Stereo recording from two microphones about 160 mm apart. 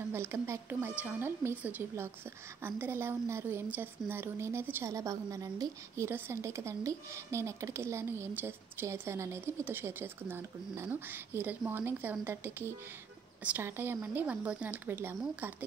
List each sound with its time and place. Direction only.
0.1 s a woman's voice: 15° right (ahead or behind)